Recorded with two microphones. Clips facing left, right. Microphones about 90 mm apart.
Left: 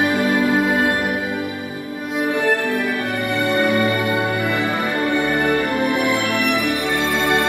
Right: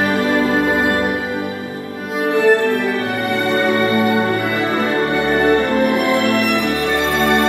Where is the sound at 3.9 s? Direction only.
35° right (ahead or behind).